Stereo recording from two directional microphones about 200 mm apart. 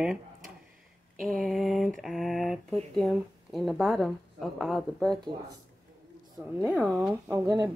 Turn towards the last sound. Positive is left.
turn(degrees=-15)  # may be behind; listen again after turning